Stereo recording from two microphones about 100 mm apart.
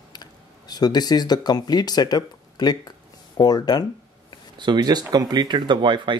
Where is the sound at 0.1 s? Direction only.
45° left (ahead or behind).